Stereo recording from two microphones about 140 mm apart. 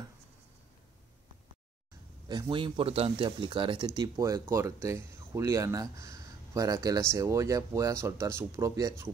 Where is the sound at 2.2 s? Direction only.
30° right (ahead or behind).